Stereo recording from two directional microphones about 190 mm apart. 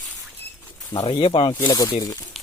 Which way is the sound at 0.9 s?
30° left (ahead or behind).